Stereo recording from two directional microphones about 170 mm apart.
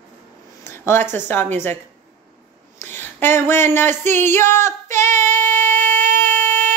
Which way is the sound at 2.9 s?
10° left (ahead or behind).